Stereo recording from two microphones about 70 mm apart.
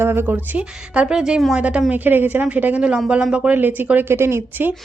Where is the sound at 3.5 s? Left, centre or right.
Right.